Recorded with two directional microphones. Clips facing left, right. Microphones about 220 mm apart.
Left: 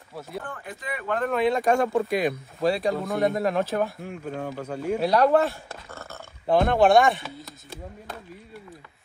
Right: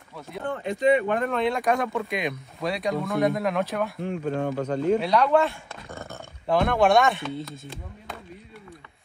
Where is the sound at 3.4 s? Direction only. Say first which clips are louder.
Left 1 dB; 30° left (ahead or behind).